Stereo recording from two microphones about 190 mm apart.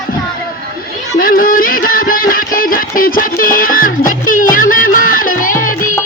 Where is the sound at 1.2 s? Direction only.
50° left (ahead or behind).